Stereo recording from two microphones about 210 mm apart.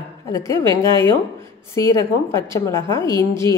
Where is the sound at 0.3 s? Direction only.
15° left (ahead or behind).